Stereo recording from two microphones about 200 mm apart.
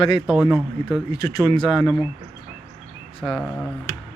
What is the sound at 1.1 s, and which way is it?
Speech, 15° left (ahead or behind).